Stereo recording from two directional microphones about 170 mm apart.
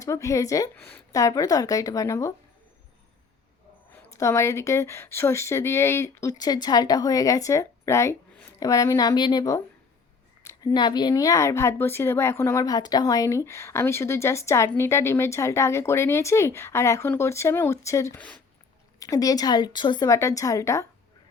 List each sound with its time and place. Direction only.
0.0 s a woman's voice: 20° left (ahead or behind)
3.9 s a woman's voice: 15° left (ahead or behind)